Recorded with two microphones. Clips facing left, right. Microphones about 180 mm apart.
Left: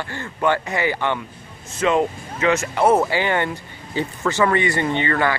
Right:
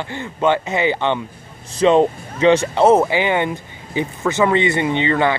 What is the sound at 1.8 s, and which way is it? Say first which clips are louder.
Speech: right 6 dB; 30° right (ahead or behind).